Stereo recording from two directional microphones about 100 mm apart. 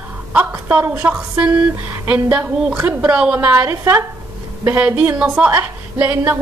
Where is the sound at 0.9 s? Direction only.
15° right (ahead or behind).